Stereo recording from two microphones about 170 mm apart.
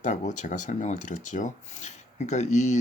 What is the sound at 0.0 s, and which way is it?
Speech, 45° left (ahead or behind).